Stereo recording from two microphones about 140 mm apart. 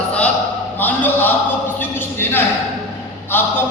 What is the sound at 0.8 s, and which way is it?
Speech, 15° left (ahead or behind).